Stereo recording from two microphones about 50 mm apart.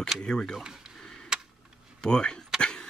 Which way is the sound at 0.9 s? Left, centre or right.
Centre.